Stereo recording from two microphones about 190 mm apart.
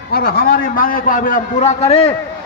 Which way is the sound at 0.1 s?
55° left (ahead or behind).